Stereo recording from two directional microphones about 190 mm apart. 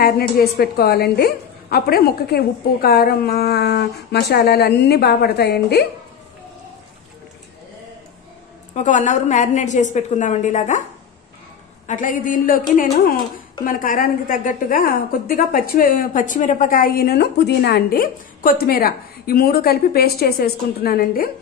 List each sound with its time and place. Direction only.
0.0 s a woman's voice: 50° left (ahead or behind)
8.7 s a woman's voice: 40° left (ahead or behind)
11.9 s a woman's voice: 45° left (ahead or behind)